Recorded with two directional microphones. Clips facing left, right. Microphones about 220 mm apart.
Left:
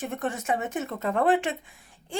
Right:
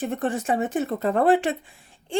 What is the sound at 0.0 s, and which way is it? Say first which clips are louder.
A woman's voice: right 5 dB; 30° right (ahead or behind).